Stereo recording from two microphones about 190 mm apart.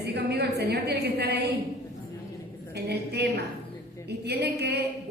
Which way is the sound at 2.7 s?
60° right (ahead or behind).